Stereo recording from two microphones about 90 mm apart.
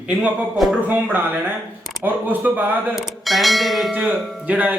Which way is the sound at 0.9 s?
20° right (ahead or behind).